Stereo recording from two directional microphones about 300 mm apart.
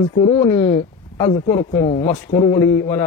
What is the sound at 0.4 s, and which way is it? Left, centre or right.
A man's voice, centre.